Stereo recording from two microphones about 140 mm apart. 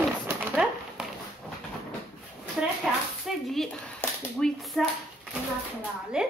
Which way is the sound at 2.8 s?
Centre (ahead or behind).